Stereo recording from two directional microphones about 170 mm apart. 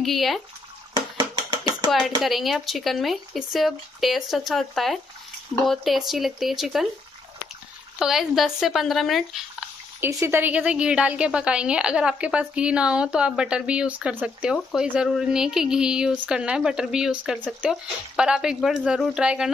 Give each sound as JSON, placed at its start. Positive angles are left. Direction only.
{"t": 0.0, "sound": "a woman's voice", "side_deg": 0}
{"t": 0.9, "sound": "a sound", "side_deg": -25}
{"t": 1.9, "sound": "a woman's voice", "side_deg": 0}
{"t": 8.0, "sound": "a woman's voice", "side_deg": 0}
{"t": 9.9, "sound": "a woman's voice", "side_deg": -15}